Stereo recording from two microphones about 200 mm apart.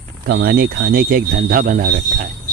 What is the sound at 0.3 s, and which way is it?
Speech, 50° right (ahead or behind).